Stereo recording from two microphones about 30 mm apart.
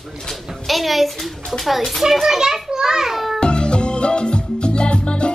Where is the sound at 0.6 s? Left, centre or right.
Centre.